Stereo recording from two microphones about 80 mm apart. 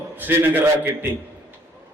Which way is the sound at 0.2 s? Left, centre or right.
Right.